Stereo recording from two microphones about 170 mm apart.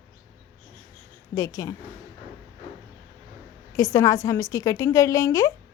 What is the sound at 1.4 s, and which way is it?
Speech, 20° left (ahead or behind).